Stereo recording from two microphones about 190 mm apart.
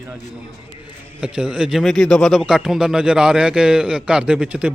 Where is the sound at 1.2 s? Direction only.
5° right (ahead or behind).